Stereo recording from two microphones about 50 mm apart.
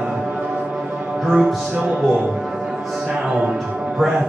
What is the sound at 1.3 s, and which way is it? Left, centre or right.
Speech, centre.